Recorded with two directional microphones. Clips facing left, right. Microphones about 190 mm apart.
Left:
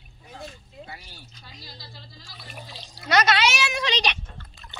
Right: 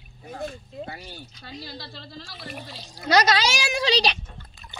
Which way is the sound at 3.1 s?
35° right (ahead or behind).